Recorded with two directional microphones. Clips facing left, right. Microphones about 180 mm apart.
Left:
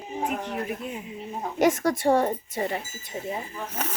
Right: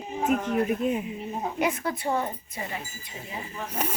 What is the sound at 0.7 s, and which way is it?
Speech, 20° right (ahead or behind).